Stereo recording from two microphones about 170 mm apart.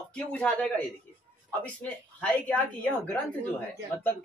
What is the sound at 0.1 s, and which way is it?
A man's voice, 5° left (ahead or behind).